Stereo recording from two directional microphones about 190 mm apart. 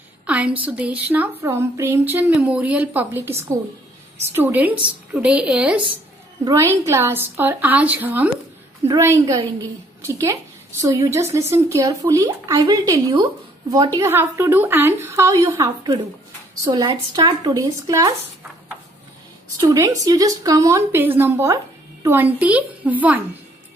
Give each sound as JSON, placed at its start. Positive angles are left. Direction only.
{"t": 0.3, "sound": "a woman's voice", "side_deg": -5}
{"t": 19.7, "sound": "speech", "side_deg": -20}